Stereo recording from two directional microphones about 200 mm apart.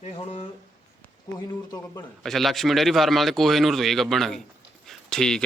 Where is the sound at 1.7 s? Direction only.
20° left (ahead or behind).